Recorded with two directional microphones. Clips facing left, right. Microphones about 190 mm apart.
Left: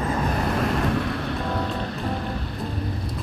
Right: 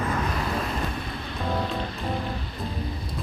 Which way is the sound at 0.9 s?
75° left (ahead or behind).